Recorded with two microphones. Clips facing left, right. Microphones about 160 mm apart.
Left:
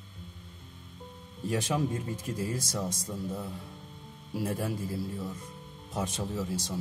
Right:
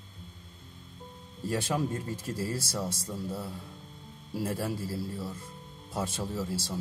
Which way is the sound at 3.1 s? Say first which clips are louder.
Even; 5° right (ahead or behind).